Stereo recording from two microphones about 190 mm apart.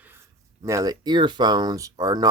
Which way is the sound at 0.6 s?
15° right (ahead or behind).